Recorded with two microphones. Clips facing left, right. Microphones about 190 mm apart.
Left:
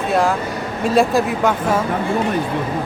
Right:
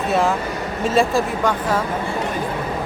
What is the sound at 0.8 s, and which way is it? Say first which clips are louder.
Speech: left 2 dB; centre (ahead or behind).